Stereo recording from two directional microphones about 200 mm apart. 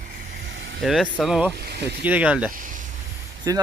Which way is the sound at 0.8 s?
Centre (ahead or behind).